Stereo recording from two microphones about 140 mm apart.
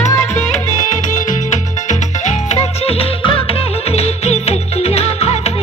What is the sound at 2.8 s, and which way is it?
Music, 45° left (ahead or behind).